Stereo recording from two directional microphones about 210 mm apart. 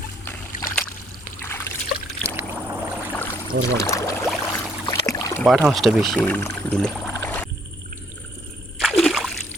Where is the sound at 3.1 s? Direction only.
10° left (ahead or behind).